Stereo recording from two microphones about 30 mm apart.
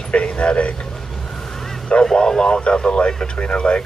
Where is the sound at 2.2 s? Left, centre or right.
Left.